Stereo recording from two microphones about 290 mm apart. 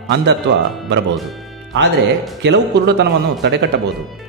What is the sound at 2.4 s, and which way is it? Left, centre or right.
A man's voice, right.